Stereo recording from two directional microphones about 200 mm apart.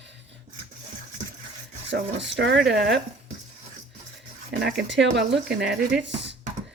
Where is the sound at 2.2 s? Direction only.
60° right (ahead or behind).